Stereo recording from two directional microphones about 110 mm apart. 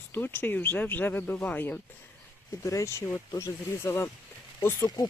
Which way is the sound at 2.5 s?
30° left (ahead or behind).